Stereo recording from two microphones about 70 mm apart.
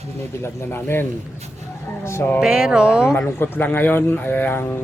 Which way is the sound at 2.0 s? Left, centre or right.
Left.